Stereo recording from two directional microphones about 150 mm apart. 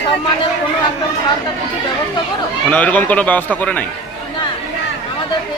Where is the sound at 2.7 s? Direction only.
10° left (ahead or behind).